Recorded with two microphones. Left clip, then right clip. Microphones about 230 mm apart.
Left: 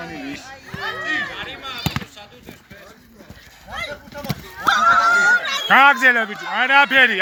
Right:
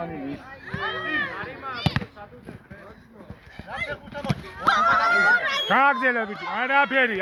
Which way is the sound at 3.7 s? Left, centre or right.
Left.